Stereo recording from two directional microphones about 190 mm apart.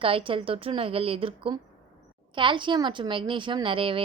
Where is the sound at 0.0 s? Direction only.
30° right (ahead or behind).